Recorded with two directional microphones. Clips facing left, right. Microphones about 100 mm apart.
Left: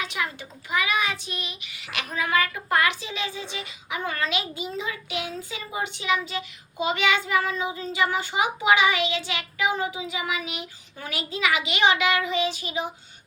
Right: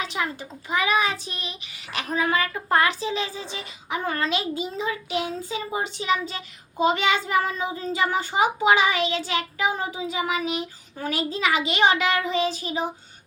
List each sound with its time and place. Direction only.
0.0 s a child's voice: 35° right (ahead or behind)